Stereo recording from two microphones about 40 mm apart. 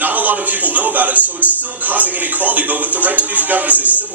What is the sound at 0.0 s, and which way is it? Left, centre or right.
Speech, right.